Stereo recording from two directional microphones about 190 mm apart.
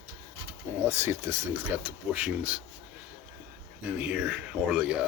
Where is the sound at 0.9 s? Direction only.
15° right (ahead or behind).